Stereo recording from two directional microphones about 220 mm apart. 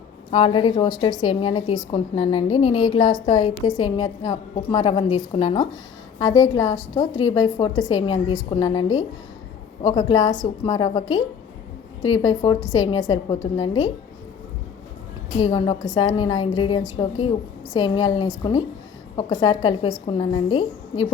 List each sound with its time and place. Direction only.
0.3 s a woman's voice: 25° left (ahead or behind)
12.2 s a woman's voice: 20° left (ahead or behind)
15.4 s a woman's voice: 25° left (ahead or behind)